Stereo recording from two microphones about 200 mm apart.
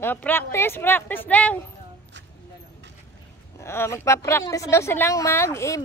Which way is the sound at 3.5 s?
10° left (ahead or behind).